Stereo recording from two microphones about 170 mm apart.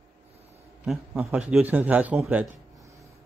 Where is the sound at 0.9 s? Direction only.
10° right (ahead or behind).